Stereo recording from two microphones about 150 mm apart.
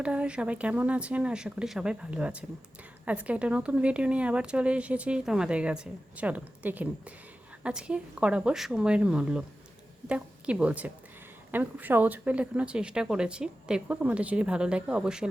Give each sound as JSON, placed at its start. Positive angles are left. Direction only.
{"t": 0.0, "sound": "a woman's voice", "side_deg": -10}